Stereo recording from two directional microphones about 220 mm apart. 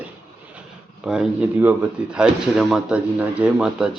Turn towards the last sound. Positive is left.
turn(degrees=-5)  # may be behind; listen again after turning